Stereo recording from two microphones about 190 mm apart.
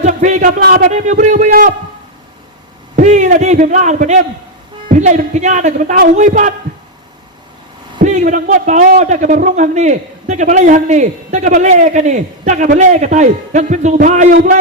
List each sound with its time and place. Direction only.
0.0 s a man's voice: 40° right (ahead or behind)
2.9 s a man's voice: 40° right (ahead or behind)
8.0 s a man's voice: 40° right (ahead or behind)